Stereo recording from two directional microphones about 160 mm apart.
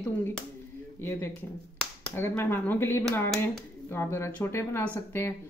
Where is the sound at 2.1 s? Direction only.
15° left (ahead or behind).